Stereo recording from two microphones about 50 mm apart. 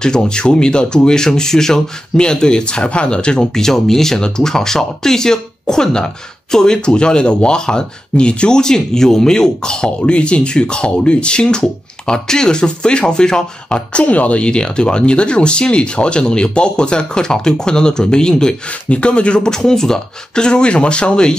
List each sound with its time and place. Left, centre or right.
0.0 s speech: centre
14.0 s speech: left; by 18.5 s centre
18.7 s speech: left